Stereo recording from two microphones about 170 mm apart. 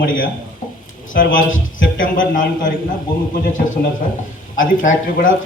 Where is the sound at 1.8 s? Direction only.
50° left (ahead or behind).